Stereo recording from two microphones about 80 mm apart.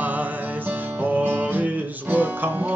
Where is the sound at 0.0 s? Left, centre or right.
Right.